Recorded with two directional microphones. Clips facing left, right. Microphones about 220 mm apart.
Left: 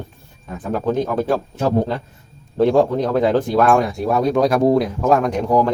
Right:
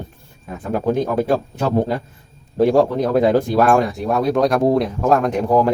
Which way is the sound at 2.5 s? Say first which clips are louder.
Even; 10° right (ahead or behind).